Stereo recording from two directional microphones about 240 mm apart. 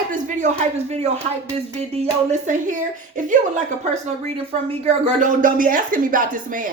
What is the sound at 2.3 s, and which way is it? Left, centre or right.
Speech, right.